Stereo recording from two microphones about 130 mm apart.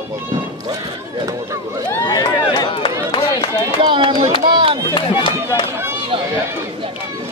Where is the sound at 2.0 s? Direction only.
30° left (ahead or behind).